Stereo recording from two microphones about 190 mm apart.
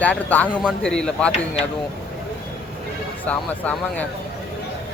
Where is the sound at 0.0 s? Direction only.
10° left (ahead or behind).